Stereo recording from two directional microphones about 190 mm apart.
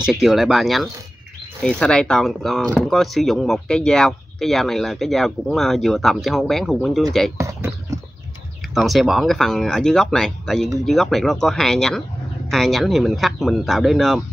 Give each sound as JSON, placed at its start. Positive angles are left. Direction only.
{"t": 0.0, "sound": "speech", "side_deg": -5}
{"t": 7.3, "sound": "a sound", "side_deg": -15}
{"t": 8.7, "sound": "speech", "side_deg": 0}